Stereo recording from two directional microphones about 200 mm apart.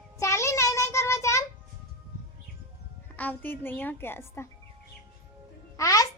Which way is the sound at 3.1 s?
10° left (ahead or behind).